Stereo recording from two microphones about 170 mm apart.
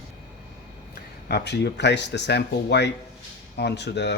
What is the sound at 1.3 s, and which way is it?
Speech, 90° left.